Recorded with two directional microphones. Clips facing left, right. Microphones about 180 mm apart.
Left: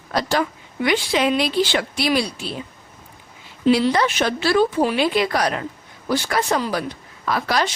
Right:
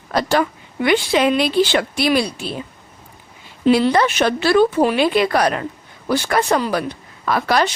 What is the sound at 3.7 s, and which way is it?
A woman's voice, 55° right (ahead or behind).